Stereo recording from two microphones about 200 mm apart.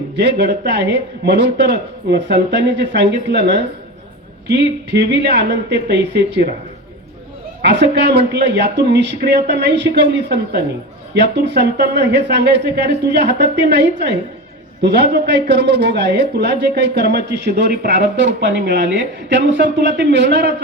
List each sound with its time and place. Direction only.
0.2 s a man's voice: 60° right (ahead or behind)
7.6 s a man's voice: 60° right (ahead or behind)